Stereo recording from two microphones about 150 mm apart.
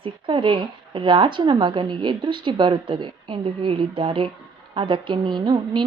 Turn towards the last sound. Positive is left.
turn(degrees=-30)  # may be behind; listen again after turning